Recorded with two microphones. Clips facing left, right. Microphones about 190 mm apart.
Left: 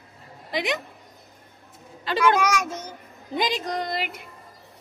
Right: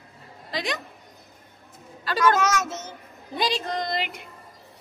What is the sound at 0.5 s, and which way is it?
Speech, 20° left (ahead or behind).